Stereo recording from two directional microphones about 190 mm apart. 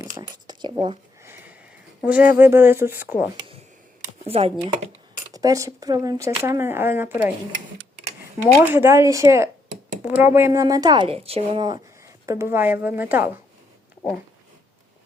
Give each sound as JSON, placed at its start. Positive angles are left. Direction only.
{"t": 0.0, "sound": "a sound", "side_deg": -20}
{"t": 1.2, "sound": "sniff", "side_deg": -10}
{"t": 2.0, "sound": "speech", "side_deg": -5}
{"t": 4.3, "sound": "speech", "side_deg": -30}
{"t": 5.3, "sound": "speech", "side_deg": -20}
{"t": 8.4, "sound": "speech", "side_deg": -15}